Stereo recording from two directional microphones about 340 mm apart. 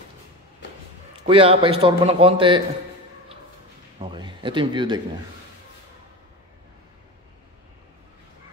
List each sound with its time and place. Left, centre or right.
1.2 s speech: centre
4.0 s speech: centre